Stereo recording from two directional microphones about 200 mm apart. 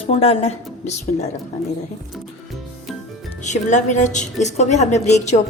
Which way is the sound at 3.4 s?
35° left (ahead or behind).